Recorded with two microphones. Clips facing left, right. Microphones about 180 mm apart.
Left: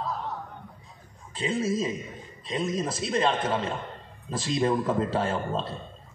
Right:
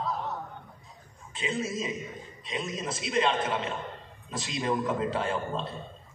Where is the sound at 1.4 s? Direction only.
35° left (ahead or behind).